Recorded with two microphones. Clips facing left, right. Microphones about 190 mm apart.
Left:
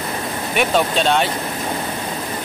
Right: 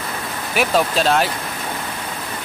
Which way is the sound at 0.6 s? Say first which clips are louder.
Even; centre (ahead or behind).